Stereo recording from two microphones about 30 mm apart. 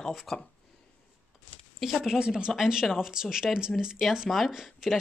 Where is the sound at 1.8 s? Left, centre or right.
Centre.